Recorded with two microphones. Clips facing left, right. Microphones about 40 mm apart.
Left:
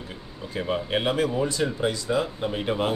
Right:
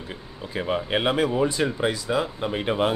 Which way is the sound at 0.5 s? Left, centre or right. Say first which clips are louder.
Right 1 dB; centre.